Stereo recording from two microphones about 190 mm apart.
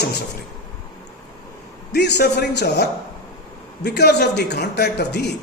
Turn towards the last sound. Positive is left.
turn(degrees=60)  # may be behind; listen again after turning